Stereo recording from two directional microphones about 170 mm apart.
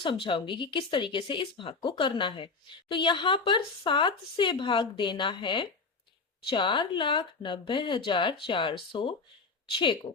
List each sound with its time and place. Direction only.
0.0 s speech: 30° left (ahead or behind)